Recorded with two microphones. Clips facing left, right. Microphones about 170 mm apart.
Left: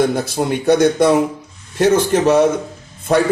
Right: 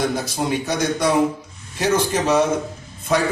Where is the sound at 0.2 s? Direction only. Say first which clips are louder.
Left 4 dB; 55° left (ahead or behind).